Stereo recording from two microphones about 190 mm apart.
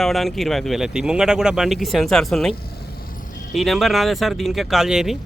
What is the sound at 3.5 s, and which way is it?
Speech, centre (ahead or behind).